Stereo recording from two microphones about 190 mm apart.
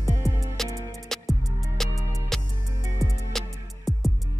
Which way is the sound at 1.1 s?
Centre (ahead or behind).